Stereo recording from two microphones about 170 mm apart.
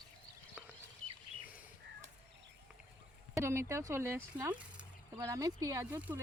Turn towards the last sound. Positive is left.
turn(degrees=-10)  # may be behind; listen again after turning